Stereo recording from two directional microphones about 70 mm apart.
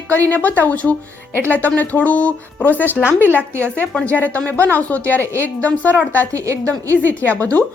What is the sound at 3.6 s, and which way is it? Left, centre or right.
Speech, centre.